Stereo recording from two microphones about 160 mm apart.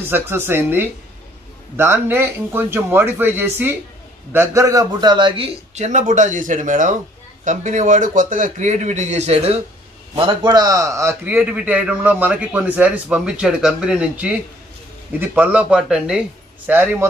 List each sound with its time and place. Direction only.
0.1 s a man's voice: 15° right (ahead or behind); by 5.5 s 30° right (ahead or behind)
5.8 s a man's voice: 50° right (ahead or behind)
10.1 s a man's voice: 30° right (ahead or behind); by 17.1 s 15° right (ahead or behind)